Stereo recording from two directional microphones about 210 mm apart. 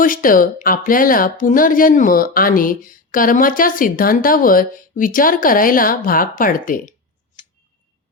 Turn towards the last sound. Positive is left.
turn(degrees=40)  # may be behind; listen again after turning